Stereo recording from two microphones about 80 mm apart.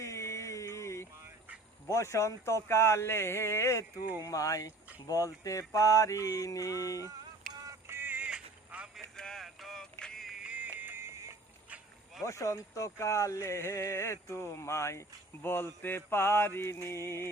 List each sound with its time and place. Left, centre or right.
0.0 s a sound: left
1.9 s speech: left
4.2 s mantra: left
7.9 s music: right
8.3 s a sound: centre
9.1 s vehicle: centre
10.0 s music: centre
10.3 s music: centre
11.1 s music: right
12.2 s speech: left